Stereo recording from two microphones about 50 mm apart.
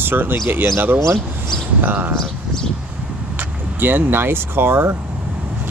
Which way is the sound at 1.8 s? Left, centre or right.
Right.